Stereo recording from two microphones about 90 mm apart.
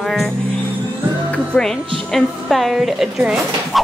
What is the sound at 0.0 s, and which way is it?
Music, 5° left (ahead or behind).